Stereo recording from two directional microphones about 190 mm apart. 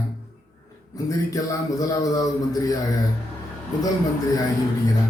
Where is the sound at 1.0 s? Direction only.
20° left (ahead or behind).